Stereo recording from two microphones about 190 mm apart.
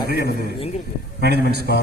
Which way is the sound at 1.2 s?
60° right (ahead or behind).